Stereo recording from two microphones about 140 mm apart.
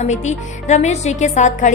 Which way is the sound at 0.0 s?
55° left (ahead or behind).